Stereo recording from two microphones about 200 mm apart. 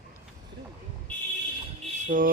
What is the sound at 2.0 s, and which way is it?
Music, 40° right (ahead or behind).